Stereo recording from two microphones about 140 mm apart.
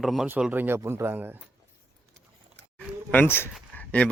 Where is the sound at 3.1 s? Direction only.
15° left (ahead or behind).